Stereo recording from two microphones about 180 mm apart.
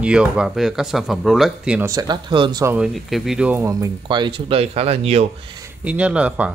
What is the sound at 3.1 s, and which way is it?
Speech, centre (ahead or behind).